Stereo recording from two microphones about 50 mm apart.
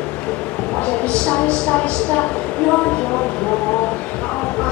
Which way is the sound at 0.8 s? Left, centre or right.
Left.